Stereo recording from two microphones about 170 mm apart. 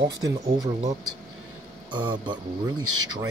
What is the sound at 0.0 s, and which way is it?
Speech, 20° right (ahead or behind).